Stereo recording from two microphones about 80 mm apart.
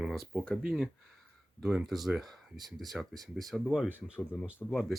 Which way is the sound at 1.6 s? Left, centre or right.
Centre.